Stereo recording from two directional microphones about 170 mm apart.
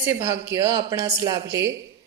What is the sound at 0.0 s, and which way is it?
A woman's voice, 10° right (ahead or behind).